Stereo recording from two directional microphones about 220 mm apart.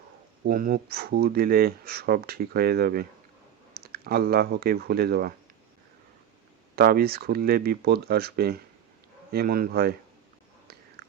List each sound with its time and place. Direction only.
0.4 s speech: 40° right (ahead or behind)
6.7 s speech: 45° right (ahead or behind)